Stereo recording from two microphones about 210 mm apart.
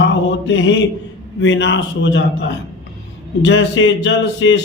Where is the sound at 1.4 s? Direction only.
60° left (ahead or behind).